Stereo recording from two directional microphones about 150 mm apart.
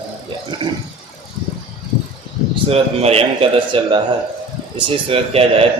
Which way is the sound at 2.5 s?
40° right (ahead or behind).